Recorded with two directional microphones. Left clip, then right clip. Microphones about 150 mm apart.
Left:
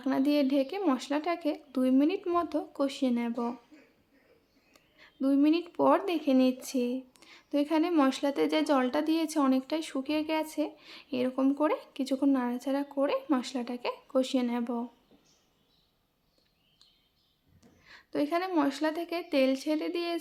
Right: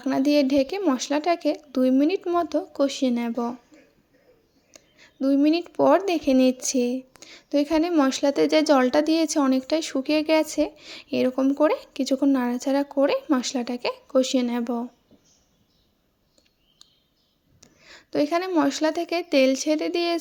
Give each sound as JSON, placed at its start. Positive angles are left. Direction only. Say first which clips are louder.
{"t": 0.1, "sound": "a woman's voice", "louder": "right 7 dB", "side_deg": -35}
{"t": 4.7, "sound": "a woman's voice", "louder": "right 6 dB", "side_deg": -30}
{"t": 17.6, "sound": "a sound", "louder": "right 6 dB", "side_deg": -40}
{"t": 18.5, "sound": "a woman's voice", "louder": "right 7 dB", "side_deg": -35}